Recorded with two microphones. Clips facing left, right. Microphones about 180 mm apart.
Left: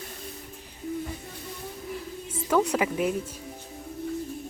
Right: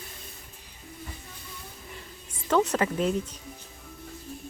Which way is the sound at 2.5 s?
10° left (ahead or behind).